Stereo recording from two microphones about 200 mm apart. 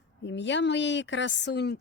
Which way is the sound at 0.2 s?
65° left (ahead or behind).